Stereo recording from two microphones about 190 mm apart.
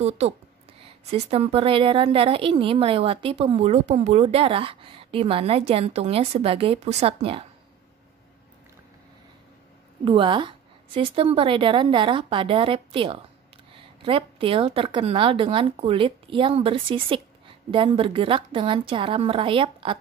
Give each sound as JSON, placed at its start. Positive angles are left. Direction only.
{"t": 0.2, "sound": "a woman's voice", "side_deg": -35}
{"t": 10.0, "sound": "a woman's voice", "side_deg": -25}